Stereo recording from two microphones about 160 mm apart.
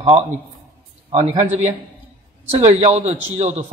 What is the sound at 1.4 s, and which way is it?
Speech, 45° right (ahead or behind).